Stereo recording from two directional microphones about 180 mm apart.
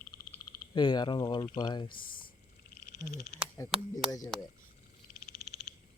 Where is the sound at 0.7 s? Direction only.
25° left (ahead or behind).